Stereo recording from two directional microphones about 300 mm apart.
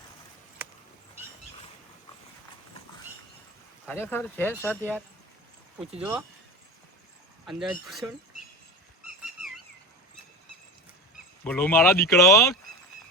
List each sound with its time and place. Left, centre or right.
3.8 s speech: centre
6.0 s speech: centre
7.4 s speech: centre
9.0 s a sound: centre
11.4 s speech: centre